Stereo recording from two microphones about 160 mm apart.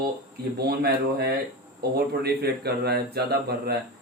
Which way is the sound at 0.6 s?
85° right.